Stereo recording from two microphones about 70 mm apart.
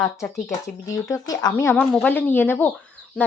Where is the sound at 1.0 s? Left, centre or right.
Left.